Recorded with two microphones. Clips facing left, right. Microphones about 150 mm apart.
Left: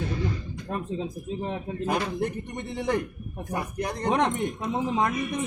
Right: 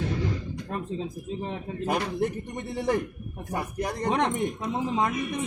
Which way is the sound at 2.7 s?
5° right (ahead or behind).